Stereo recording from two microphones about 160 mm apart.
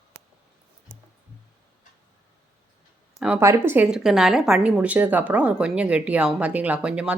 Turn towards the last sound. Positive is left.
turn(degrees=-5)  # may be behind; listen again after turning